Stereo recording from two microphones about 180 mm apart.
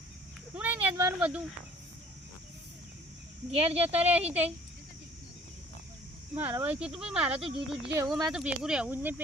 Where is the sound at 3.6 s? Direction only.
35° right (ahead or behind).